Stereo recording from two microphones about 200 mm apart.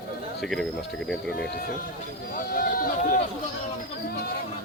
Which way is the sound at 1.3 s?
50° left (ahead or behind).